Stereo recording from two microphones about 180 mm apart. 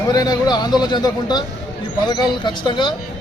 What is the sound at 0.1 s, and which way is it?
Speech, 20° left (ahead or behind).